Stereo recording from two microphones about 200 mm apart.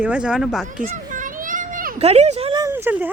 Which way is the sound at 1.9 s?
30° right (ahead or behind).